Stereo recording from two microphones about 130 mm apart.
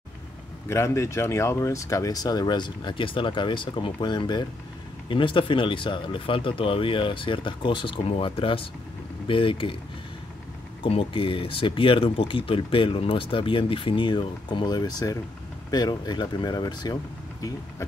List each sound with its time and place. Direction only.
0.7 s speech: 20° left (ahead or behind); by 9.8 s 40° left (ahead or behind)
10.8 s speech: 45° left (ahead or behind); by 17.8 s 30° left (ahead or behind)